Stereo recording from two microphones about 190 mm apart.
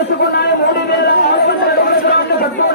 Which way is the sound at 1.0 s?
60° left (ahead or behind).